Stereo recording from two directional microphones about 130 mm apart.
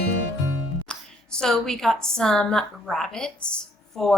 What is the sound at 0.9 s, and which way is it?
A woman's voice, 5° left (ahead or behind).